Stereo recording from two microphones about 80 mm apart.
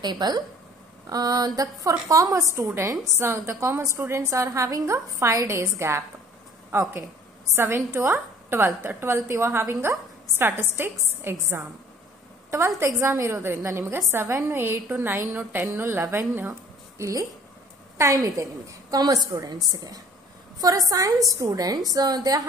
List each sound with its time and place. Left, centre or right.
0.0 s a woman's voice: right
17.0 s a woman's voice: right